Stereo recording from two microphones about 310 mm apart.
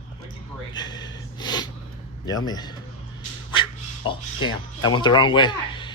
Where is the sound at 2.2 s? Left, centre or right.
Centre.